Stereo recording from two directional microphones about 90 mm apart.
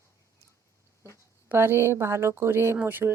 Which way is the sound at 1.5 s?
25° right (ahead or behind).